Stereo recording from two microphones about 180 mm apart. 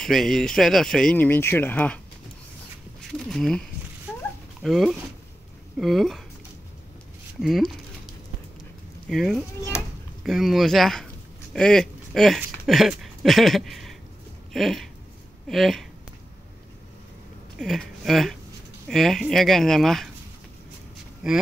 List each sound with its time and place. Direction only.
0.0 s speech: centre (ahead or behind)
3.2 s speech: centre (ahead or behind)
4.1 s dog: 5° right (ahead or behind)
4.6 s speech: centre (ahead or behind)
7.3 s speech: centre (ahead or behind)
9.1 s speech: centre (ahead or behind)
17.6 s speech: centre (ahead or behind)
21.2 s speech: centre (ahead or behind)